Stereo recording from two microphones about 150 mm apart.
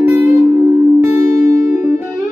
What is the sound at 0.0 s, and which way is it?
Music, 20° right (ahead or behind).